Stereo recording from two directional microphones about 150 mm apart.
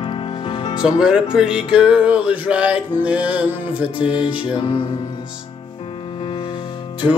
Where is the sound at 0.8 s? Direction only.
5° right (ahead or behind).